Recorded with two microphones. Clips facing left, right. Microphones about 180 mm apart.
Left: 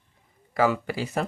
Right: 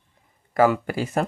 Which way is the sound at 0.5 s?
50° right (ahead or behind).